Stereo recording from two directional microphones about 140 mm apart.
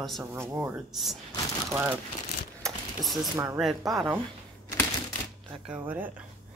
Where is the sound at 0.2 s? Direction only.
20° right (ahead or behind).